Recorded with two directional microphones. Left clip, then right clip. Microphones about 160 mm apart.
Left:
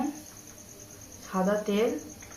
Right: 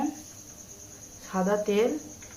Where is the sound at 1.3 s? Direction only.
20° right (ahead or behind).